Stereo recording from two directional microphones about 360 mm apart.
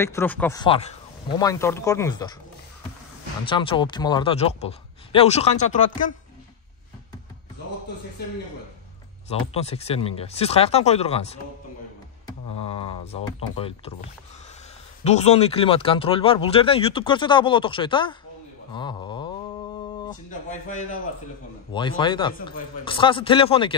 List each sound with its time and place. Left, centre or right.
0.0 s speech: centre
3.4 s speech: centre
9.3 s speech: centre
12.7 s speech: centre
15.0 s speech: centre
18.7 s a sound: centre
21.7 s speech: centre